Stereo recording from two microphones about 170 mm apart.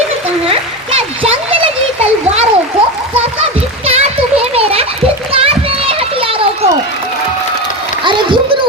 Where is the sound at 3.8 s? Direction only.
35° right (ahead or behind).